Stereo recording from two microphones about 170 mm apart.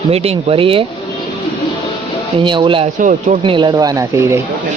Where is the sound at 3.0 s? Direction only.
50° right (ahead or behind).